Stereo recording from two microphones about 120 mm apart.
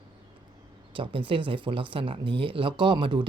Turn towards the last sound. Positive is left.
turn(degrees=-40)  # may be behind; listen again after turning